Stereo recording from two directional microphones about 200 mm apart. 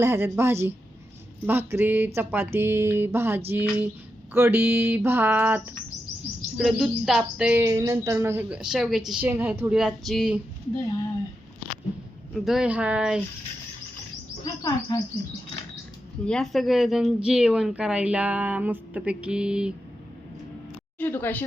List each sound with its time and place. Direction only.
0.0 s mantra: 10° right (ahead or behind)
6.6 s speech: centre (ahead or behind)
7.6 s mantra: 15° right (ahead or behind)
12.3 s speech: centre (ahead or behind)
14.4 s bird: 20° left (ahead or behind)
16.2 s speech: 5° left (ahead or behind)
21.0 s speech: 10° left (ahead or behind)